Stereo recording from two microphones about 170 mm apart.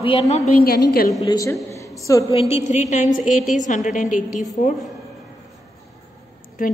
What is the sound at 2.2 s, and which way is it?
A woman's voice, 35° left (ahead or behind).